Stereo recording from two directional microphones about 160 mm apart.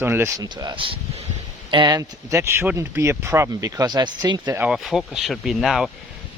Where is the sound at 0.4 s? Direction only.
25° right (ahead or behind).